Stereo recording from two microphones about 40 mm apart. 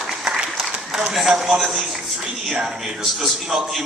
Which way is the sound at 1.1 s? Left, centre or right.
Centre.